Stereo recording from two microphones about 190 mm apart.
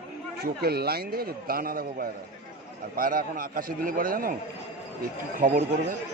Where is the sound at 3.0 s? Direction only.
50° right (ahead or behind).